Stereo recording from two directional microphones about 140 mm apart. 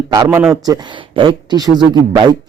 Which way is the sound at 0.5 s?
25° right (ahead or behind).